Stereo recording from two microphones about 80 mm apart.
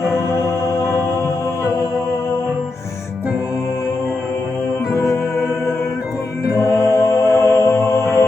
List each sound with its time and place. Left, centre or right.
4.9 s music: left
6.6 s music: left